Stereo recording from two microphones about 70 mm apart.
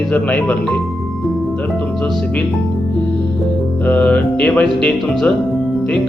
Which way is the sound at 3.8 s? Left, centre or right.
Centre.